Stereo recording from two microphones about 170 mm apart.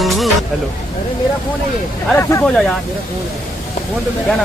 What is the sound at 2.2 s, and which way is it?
Speech, 15° left (ahead or behind).